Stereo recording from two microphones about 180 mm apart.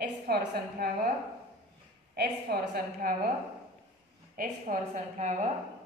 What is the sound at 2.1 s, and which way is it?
A woman's voice, 60° right (ahead or behind).